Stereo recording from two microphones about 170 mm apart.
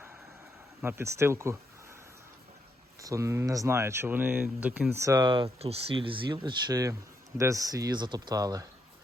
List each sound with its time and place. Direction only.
0.8 s speech: 15° right (ahead or behind)
3.0 s speech: 20° right (ahead or behind)